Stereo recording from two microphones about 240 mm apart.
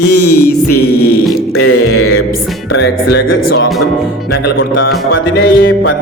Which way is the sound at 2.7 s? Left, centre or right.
Left.